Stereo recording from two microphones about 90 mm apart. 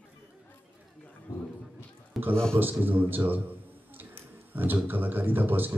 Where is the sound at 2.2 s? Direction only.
Centre (ahead or behind).